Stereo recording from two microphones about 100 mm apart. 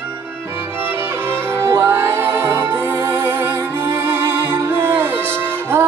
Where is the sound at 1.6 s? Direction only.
25° right (ahead or behind).